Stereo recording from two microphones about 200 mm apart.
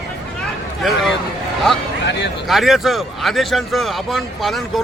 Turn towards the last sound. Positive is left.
turn(degrees=0)  # may be behind; listen again after turning